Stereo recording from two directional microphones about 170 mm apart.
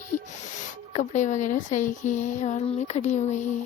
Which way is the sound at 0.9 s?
45° left (ahead or behind).